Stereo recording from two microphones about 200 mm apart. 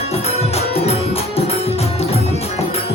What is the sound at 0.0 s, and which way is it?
Music, 30° left (ahead or behind).